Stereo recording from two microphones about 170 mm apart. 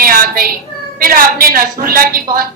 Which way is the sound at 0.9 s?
60° right (ahead or behind).